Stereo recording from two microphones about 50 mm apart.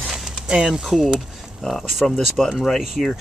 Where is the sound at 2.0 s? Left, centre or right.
Centre.